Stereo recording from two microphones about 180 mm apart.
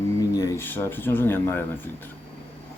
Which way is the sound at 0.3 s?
20° left (ahead or behind).